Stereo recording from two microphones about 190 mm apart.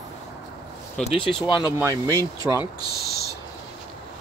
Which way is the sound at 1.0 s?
30° left (ahead or behind).